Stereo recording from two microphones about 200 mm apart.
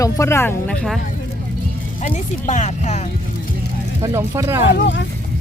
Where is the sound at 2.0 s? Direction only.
35° left (ahead or behind).